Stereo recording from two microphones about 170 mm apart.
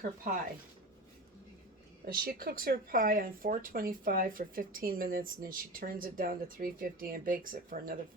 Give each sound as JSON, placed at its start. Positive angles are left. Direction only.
{"t": 2.0, "sound": "speech", "side_deg": -60}